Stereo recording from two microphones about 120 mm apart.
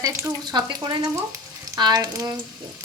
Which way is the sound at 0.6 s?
35° right (ahead or behind).